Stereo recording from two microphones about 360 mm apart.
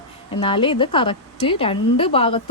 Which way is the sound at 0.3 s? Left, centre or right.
Centre.